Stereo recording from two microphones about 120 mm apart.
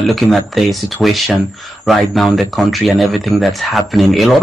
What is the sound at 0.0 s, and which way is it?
A man's voice, centre (ahead or behind).